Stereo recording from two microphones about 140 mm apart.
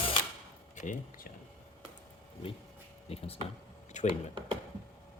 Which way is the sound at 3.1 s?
45° left (ahead or behind).